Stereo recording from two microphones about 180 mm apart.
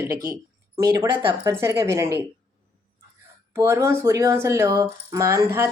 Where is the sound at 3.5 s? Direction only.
15° right (ahead or behind).